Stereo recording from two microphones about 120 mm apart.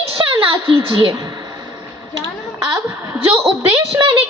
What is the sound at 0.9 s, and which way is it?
Speech, 40° right (ahead or behind).